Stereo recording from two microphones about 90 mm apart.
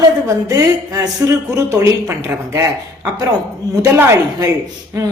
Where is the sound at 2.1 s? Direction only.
30° right (ahead or behind).